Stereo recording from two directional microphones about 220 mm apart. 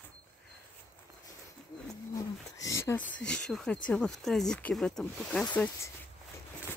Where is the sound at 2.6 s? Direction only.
15° left (ahead or behind).